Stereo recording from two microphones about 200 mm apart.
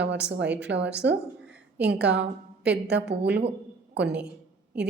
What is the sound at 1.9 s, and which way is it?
A woman's voice, 60° right (ahead or behind).